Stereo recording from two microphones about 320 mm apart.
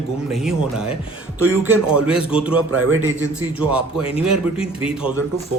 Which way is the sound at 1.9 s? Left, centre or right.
Centre.